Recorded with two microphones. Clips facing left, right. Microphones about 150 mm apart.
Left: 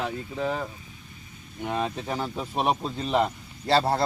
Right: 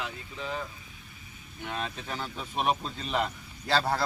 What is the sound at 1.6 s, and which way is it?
A man's voice, 35° left (ahead or behind).